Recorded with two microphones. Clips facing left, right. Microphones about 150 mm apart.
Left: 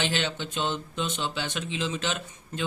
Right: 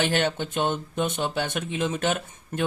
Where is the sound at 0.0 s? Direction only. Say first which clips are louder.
Right 5 dB; 55° right (ahead or behind).